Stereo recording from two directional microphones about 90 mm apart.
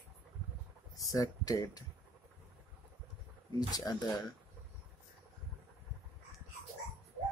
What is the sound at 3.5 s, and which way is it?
Speech, 50° left (ahead or behind).